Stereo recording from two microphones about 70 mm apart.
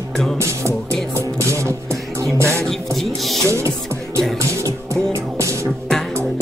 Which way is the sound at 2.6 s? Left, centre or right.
Centre.